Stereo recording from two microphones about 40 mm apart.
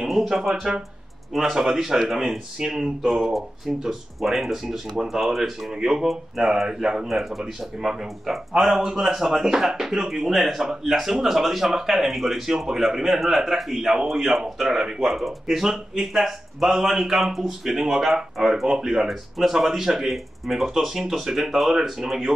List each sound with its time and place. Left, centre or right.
0.0 s speech: centre
4.2 s speech: centre
7.1 s speech: centre
19.0 s speech: centre